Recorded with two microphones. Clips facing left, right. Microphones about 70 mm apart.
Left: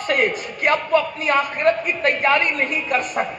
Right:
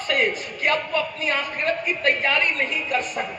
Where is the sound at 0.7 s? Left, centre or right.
Left.